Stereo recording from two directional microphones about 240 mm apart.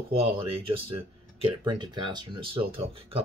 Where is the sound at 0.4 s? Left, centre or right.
Right.